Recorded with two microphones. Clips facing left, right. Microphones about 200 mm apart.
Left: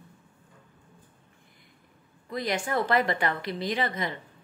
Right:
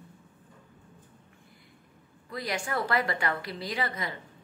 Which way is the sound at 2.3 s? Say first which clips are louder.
Left 4 dB; 20° left (ahead or behind).